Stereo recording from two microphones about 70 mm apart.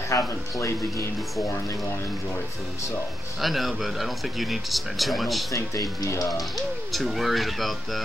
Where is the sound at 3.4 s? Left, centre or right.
Centre.